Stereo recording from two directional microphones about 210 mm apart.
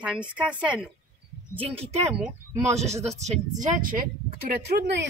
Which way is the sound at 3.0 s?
35° right (ahead or behind).